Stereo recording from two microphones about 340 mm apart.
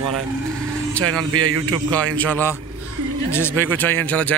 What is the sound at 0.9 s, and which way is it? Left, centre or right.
Speech, centre.